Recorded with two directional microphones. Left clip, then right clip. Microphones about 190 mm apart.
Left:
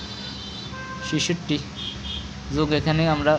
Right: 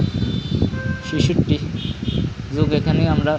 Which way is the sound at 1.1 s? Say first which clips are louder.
Right 4 dB; 15° left (ahead or behind).